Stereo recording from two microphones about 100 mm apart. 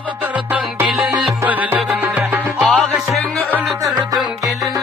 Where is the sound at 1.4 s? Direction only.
15° right (ahead or behind).